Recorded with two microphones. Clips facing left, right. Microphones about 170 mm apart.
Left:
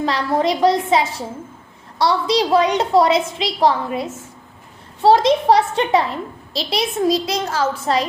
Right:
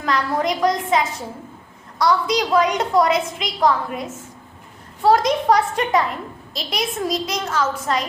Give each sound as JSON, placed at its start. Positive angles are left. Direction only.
{"t": 0.0, "sound": "a woman's voice", "side_deg": 30}